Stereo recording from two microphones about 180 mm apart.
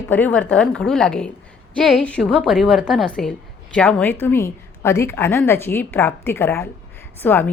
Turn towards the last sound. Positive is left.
turn(degrees=10)  # may be behind; listen again after turning